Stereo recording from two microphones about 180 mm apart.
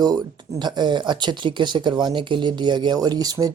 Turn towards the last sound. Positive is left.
turn(degrees=-20)  # may be behind; listen again after turning